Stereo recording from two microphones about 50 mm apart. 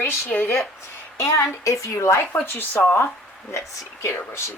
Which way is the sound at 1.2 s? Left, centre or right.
Left.